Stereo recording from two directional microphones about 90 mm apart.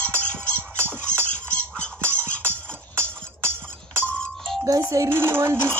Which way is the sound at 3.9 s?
15° left (ahead or behind).